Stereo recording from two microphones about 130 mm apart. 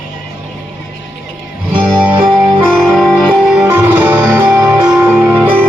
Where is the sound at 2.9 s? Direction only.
10° left (ahead or behind).